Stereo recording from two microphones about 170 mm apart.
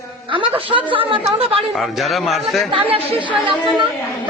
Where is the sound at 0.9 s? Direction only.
30° right (ahead or behind).